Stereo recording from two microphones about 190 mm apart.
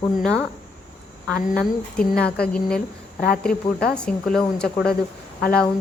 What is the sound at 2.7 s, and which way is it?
Speech, 55° left (ahead or behind).